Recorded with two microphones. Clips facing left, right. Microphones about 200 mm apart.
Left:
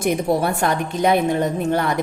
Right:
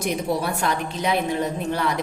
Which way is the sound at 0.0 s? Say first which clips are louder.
Left 5 dB; 50° left (ahead or behind).